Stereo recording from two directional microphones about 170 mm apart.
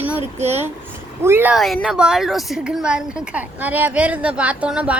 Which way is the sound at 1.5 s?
Centre (ahead or behind).